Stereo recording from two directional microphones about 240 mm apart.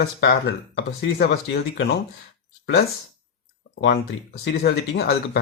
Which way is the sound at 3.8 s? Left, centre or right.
Left.